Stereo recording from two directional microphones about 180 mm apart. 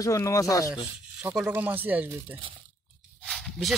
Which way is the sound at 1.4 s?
10° right (ahead or behind).